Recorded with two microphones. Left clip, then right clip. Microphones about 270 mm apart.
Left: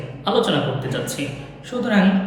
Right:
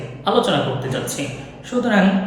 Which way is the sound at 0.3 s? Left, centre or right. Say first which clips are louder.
Right 2 dB; centre.